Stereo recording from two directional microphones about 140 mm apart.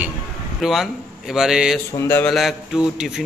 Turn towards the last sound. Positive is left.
turn(degrees=-5)  # may be behind; listen again after turning